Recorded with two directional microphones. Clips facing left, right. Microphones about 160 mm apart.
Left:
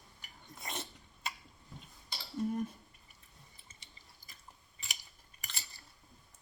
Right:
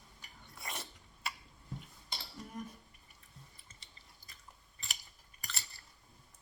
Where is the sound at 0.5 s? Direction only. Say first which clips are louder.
Left 2 dB; 20° left (ahead or behind).